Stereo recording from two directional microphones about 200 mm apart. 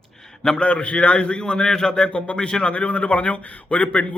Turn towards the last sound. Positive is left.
turn(degrees=5)  # may be behind; listen again after turning